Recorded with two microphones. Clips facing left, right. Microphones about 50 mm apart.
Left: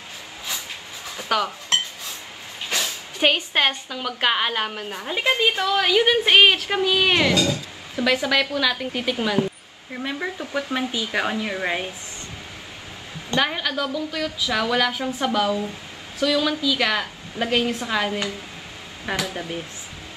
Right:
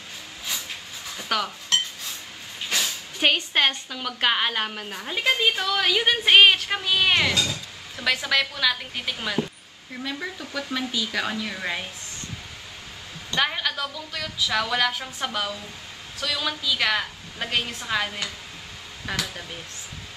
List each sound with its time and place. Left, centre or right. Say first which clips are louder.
1.1 s speech: left 4 dB; centre
2.7 s speech: left 1 dB; centre
9.9 s speech: left 4 dB; centre
13.4 s speech: left 2 dB; centre
19.0 s speech: left 4 dB; centre